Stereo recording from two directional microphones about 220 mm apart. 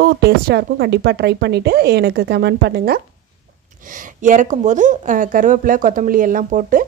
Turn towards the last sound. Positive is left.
turn(degrees=-35)  # may be behind; listen again after turning